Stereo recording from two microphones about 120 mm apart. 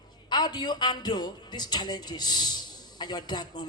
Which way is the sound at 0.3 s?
35° left (ahead or behind).